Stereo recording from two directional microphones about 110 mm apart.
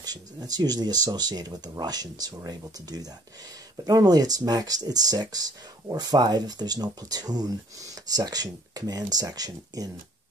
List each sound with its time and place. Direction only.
0.0 s speech: 35° right (ahead or behind)